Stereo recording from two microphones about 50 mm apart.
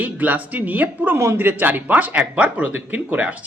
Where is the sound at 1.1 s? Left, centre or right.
Right.